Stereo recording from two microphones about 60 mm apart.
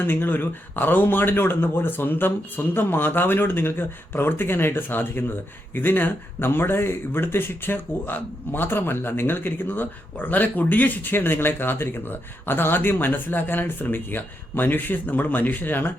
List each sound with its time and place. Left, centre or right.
0.0 s speech: left